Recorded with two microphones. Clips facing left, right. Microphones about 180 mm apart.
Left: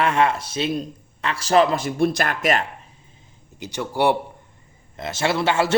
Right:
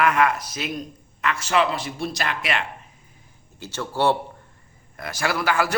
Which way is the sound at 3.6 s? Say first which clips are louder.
Left 2 dB; 15° left (ahead or behind).